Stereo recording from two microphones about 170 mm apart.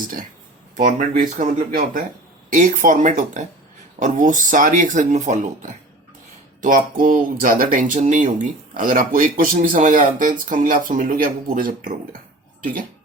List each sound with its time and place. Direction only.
0.9 s speech: 45° right (ahead or behind)